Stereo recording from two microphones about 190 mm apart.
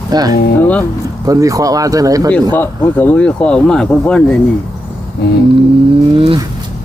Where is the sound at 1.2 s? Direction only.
20° right (ahead or behind).